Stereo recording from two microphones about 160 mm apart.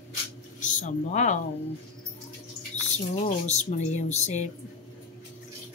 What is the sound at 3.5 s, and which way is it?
A woman's voice, 45° left (ahead or behind).